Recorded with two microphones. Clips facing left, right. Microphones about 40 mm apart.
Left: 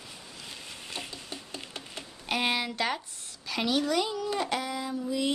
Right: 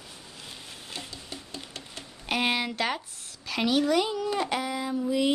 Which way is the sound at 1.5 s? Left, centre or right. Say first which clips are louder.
Even; left.